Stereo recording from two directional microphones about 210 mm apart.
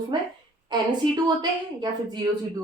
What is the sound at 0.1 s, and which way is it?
A woman's voice, 20° right (ahead or behind).